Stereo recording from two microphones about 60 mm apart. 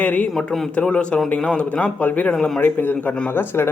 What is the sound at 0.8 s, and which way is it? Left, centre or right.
A man's voice, centre.